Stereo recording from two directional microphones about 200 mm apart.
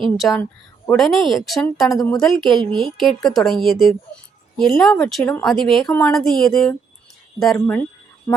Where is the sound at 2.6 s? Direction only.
25° right (ahead or behind).